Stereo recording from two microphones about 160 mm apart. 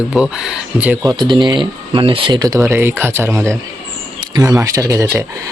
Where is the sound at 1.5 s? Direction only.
30° right (ahead or behind).